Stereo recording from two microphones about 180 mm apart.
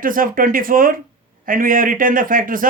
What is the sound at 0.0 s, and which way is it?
Speech, 50° right (ahead or behind).